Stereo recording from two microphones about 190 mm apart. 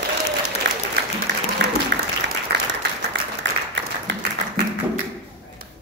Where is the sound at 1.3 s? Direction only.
70° right (ahead or behind).